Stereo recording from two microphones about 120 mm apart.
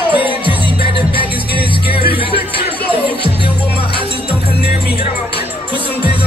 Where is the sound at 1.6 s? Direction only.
45° left (ahead or behind).